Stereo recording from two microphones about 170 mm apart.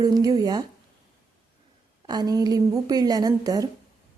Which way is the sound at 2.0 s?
25° right (ahead or behind).